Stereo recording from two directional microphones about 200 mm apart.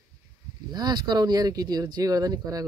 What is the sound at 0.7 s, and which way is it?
Speech, 20° right (ahead or behind).